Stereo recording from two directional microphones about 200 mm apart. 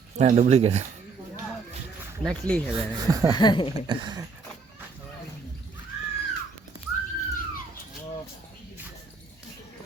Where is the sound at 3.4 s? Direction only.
25° left (ahead or behind).